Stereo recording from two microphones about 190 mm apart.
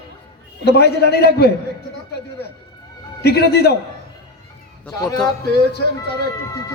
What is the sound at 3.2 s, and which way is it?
Speech, 60° left (ahead or behind).